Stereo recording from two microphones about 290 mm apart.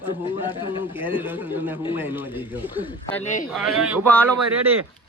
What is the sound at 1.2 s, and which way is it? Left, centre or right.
Speech, centre.